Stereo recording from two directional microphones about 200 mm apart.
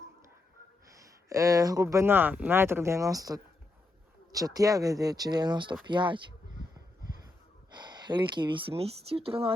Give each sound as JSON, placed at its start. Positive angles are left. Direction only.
{"t": 0.9, "sound": "speech", "side_deg": -15}
{"t": 7.7, "sound": "speech", "side_deg": -20}